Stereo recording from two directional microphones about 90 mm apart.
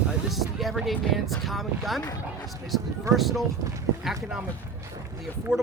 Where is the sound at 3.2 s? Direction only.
Centre (ahead or behind).